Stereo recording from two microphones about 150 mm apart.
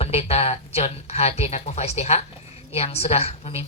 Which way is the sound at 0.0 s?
40° left (ahead or behind).